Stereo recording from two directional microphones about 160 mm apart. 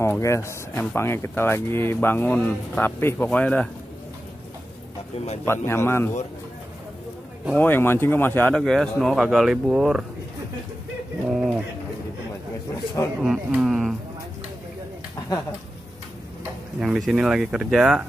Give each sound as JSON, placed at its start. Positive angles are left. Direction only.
{"t": 0.0, "sound": "speech", "side_deg": 15}
{"t": 5.1, "sound": "speech", "side_deg": 40}
{"t": 5.4, "sound": "speech", "side_deg": 15}
{"t": 7.5, "sound": "speech", "side_deg": 10}
{"t": 11.2, "sound": "speech", "side_deg": 0}
{"t": 13.2, "sound": "speech", "side_deg": 0}
{"t": 16.8, "sound": "speech", "side_deg": 0}